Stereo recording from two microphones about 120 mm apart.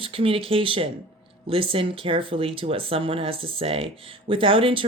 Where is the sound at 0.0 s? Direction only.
50° right (ahead or behind).